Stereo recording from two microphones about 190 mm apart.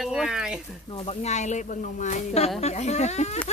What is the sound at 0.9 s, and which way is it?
Speech, 30° left (ahead or behind).